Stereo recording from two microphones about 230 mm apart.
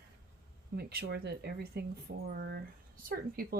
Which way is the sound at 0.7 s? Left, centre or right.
Right.